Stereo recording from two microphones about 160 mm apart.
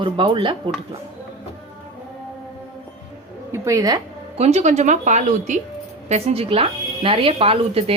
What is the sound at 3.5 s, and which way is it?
Speech, 20° right (ahead or behind).